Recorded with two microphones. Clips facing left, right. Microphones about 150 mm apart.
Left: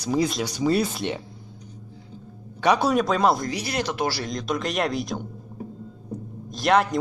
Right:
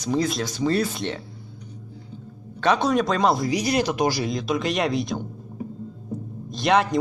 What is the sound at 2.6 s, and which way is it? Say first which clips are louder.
Speech: even; 10° left (ahead or behind).